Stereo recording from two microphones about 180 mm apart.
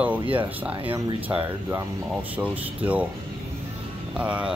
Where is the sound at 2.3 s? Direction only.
10° right (ahead or behind).